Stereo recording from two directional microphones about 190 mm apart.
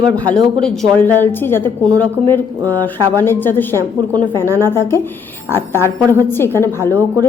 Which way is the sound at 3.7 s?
20° right (ahead or behind).